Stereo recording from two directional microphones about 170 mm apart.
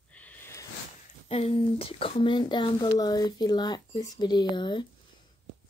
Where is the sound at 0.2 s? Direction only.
10° left (ahead or behind).